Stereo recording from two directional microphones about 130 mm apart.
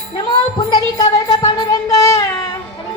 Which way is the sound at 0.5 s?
35° left (ahead or behind).